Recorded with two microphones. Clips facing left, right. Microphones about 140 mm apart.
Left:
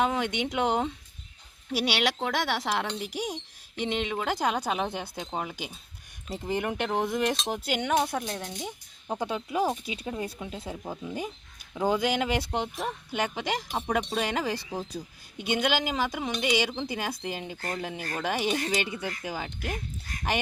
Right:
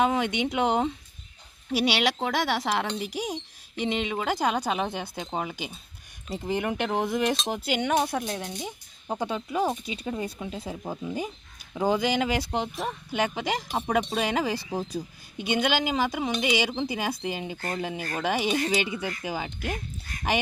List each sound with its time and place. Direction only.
0.0 s speech: 5° right (ahead or behind)